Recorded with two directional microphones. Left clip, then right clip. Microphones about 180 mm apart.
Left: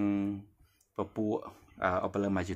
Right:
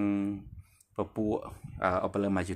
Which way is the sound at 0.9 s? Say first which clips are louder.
Right 2 dB; 10° right (ahead or behind).